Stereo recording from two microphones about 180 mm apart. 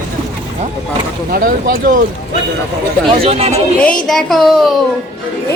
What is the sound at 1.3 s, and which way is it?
Speech, 55° right (ahead or behind).